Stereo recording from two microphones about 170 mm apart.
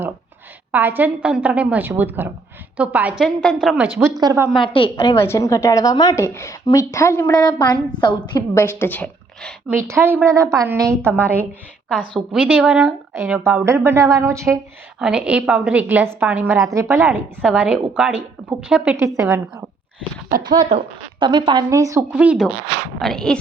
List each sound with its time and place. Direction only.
0.7 s a woman's voice: 10° right (ahead or behind)
4.2 s speech: 20° right (ahead or behind)
4.6 s a woman's voice: 30° left (ahead or behind)
5.1 s a woman's voice: 15° left (ahead or behind)
7.8 s a woman's voice: 5° left (ahead or behind)
8.3 s a woman's voice: 20° left (ahead or behind)
9.6 s a woman's voice: 15° right (ahead or behind)
12.1 s a woman's voice: centre (ahead or behind); by 14.6 s 15° right (ahead or behind)
14.9 s a woman's voice: 5° right (ahead or behind)
22.1 s a woman's voice: 5° right (ahead or behind)
23.0 s speech: 5° left (ahead or behind)